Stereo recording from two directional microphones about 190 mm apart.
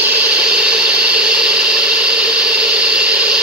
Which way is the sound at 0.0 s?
5° right (ahead or behind).